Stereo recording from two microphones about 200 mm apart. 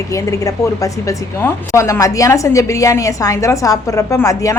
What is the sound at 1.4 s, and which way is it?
A woman's voice, 15° left (ahead or behind).